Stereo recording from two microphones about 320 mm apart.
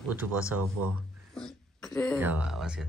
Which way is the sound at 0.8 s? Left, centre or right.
Right.